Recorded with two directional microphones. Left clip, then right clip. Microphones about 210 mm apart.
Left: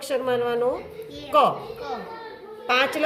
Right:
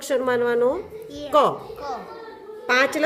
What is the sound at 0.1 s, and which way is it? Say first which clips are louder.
A woman's voice: right 3 dB; 55° right (ahead or behind).